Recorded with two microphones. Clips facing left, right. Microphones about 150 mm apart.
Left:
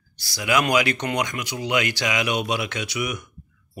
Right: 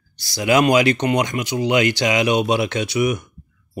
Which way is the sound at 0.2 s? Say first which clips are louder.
Right 6 dB; 25° right (ahead or behind).